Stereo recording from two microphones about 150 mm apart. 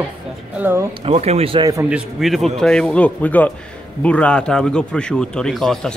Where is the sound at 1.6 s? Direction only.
20° right (ahead or behind).